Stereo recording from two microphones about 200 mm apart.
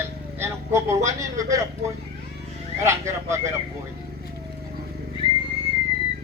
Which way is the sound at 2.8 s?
15° right (ahead or behind).